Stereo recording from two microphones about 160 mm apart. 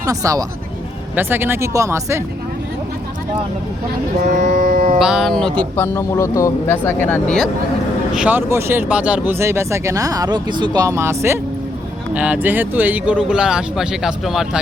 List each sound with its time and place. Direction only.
0.0 s speech: 20° right (ahead or behind)
4.3 s music: 65° right (ahead or behind)
4.9 s speech: 5° right (ahead or behind); by 7.3 s 10° left (ahead or behind)
8.1 s speech: 10° right (ahead or behind)